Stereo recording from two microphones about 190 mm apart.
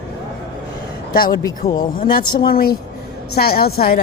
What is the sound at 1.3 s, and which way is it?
Speech, 20° left (ahead or behind).